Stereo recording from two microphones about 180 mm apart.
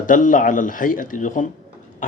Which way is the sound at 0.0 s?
45° left (ahead or behind).